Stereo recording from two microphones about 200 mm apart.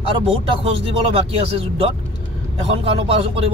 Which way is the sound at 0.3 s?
25° right (ahead or behind).